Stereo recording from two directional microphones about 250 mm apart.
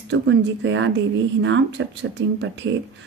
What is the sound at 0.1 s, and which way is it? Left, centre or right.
Speech, right.